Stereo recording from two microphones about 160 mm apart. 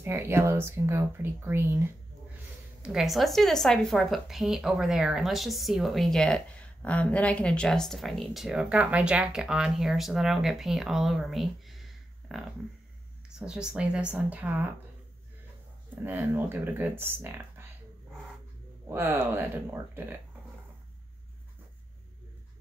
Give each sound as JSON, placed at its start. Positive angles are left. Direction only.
{"t": 0.0, "sound": "speech", "side_deg": -15}
{"t": 2.8, "sound": "a woman's voice", "side_deg": -5}
{"t": 13.5, "sound": "a woman's voice", "side_deg": -5}
{"t": 15.9, "sound": "speech", "side_deg": -10}
{"t": 18.9, "sound": "speech", "side_deg": -15}